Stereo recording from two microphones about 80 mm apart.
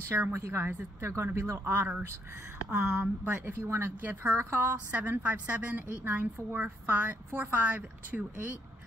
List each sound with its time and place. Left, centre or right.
0.1 s a woman's voice: right; by 8.5 s centre